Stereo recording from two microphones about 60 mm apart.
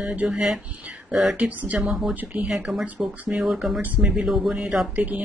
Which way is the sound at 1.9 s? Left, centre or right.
Centre.